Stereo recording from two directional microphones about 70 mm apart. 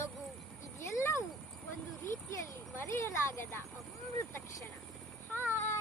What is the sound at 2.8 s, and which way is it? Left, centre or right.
Speech, left.